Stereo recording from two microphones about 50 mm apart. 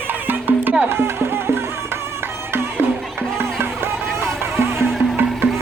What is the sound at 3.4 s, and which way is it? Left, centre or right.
Music, right.